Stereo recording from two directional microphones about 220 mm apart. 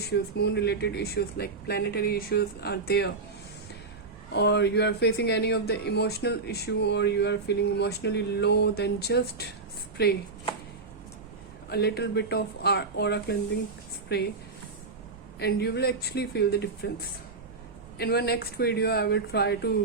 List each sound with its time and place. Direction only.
0.0 s speech: 50° left (ahead or behind)
4.3 s speech: 50° left (ahead or behind)
11.7 s speech: 45° left (ahead or behind)
15.4 s speech: 45° left (ahead or behind)